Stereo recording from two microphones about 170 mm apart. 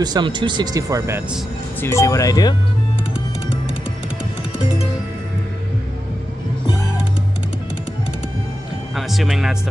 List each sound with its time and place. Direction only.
0.0 s speech: 25° right (ahead or behind)
1.8 s speech: 15° left (ahead or behind)
8.9 s speech: centre (ahead or behind)